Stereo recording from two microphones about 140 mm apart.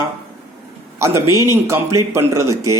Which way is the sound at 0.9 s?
20° right (ahead or behind).